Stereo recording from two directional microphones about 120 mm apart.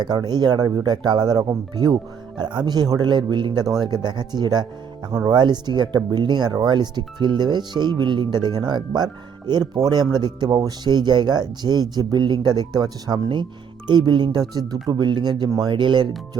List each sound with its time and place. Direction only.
0.0 s speech: 35° right (ahead or behind)